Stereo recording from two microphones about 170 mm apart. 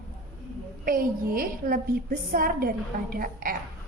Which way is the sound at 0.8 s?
55° right (ahead or behind).